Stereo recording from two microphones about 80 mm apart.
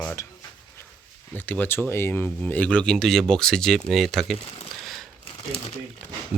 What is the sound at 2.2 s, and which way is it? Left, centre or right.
Speech, centre.